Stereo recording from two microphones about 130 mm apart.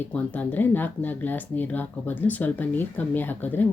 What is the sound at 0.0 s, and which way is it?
A woman's voice, 10° left (ahead or behind).